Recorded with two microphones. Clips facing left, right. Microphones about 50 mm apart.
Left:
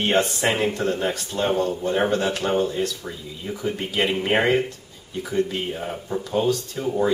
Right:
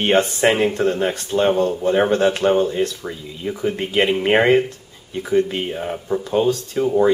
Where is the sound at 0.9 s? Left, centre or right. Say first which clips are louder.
Right 4 dB; right.